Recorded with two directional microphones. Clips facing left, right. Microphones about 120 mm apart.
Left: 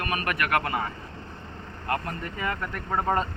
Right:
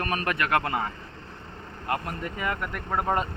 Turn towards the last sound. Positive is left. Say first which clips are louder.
# left 1 dB
turn(degrees=-10)  # may be behind; listen again after turning